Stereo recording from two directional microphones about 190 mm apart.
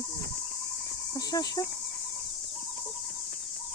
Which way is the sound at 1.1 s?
20° left (ahead or behind).